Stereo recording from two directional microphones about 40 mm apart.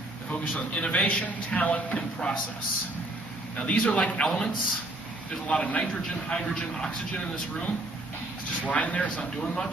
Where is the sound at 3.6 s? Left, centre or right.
Left.